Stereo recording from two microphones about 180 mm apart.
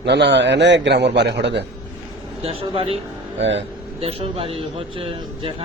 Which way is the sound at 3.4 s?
90° right.